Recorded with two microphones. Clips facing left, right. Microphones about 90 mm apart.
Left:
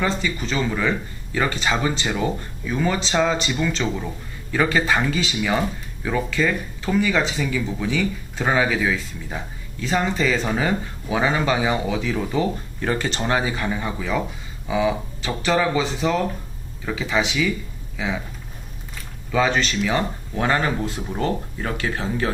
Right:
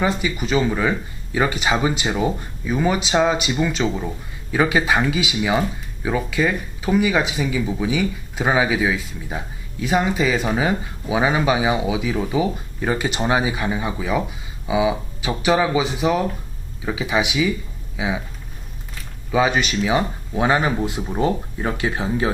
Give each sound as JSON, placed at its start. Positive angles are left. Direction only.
{"t": 0.0, "sound": "speech", "side_deg": -15}
{"t": 19.3, "sound": "speech", "side_deg": -15}